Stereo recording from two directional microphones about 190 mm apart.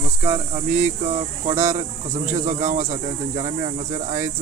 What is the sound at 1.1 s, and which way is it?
Speech, 40° right (ahead or behind).